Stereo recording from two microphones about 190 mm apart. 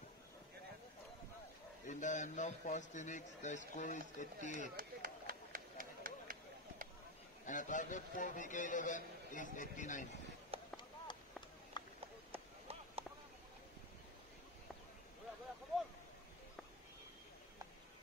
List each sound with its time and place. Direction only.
1.9 s a man's voice: 40° left (ahead or behind)
4.7 s a sound: 50° right (ahead or behind)
7.4 s a man's voice: 40° left (ahead or behind)
10.5 s a sound: 30° right (ahead or behind)
11.7 s run: 25° left (ahead or behind)
12.3 s run: 30° right (ahead or behind)